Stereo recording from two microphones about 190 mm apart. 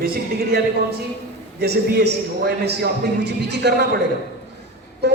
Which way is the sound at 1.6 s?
60° right (ahead or behind).